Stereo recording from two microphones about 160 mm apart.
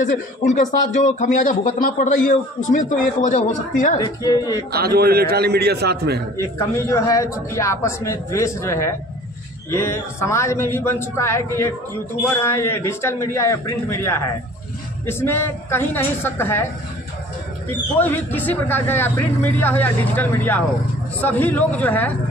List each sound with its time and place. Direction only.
0.0 s a man's voice: 55° left (ahead or behind)
4.0 s a man's voice: 20° left (ahead or behind)
4.7 s a man's voice: 75° right (ahead or behind)
6.3 s a man's voice: 20° left (ahead or behind)
17.9 s speech: 10° left (ahead or behind)